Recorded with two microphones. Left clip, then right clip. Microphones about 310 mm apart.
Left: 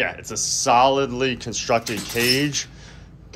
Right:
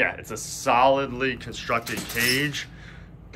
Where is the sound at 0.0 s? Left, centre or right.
Centre.